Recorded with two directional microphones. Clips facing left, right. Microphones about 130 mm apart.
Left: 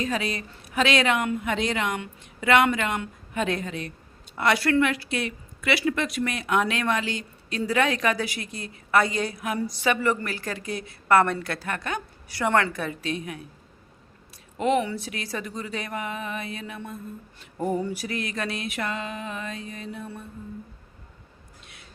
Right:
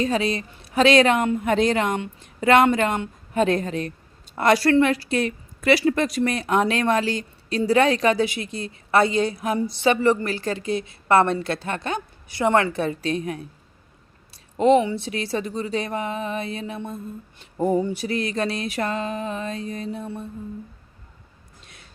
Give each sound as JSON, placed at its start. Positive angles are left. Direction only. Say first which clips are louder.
{"t": 0.0, "sound": "a woman's voice", "louder": "right 5 dB", "side_deg": -30}
{"t": 14.6, "sound": "a woman's voice", "louder": "right 6 dB", "side_deg": -25}